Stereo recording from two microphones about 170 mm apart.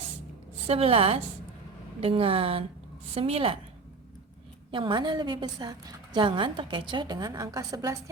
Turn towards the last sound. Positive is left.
turn(degrees=-20)  # may be behind; listen again after turning